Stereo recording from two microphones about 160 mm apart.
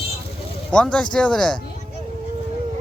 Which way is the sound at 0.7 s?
5° left (ahead or behind).